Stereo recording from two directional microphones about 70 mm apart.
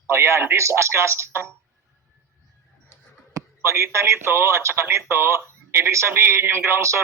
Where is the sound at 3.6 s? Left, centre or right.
Right.